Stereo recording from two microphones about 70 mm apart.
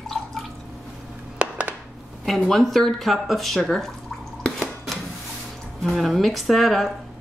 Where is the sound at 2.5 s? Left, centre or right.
Centre.